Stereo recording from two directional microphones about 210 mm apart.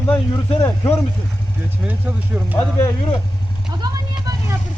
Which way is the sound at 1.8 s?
10° right (ahead or behind).